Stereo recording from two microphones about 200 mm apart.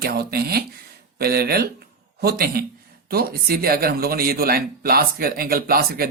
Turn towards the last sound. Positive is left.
turn(degrees=-50)  # may be behind; listen again after turning